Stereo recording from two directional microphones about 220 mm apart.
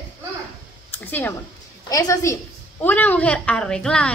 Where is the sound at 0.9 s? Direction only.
10° left (ahead or behind).